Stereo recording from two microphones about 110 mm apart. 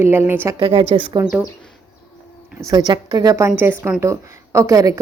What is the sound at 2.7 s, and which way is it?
A woman's voice, 35° right (ahead or behind).